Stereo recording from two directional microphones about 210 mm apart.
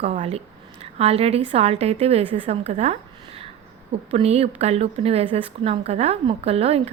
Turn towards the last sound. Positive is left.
turn(degrees=-30)  # may be behind; listen again after turning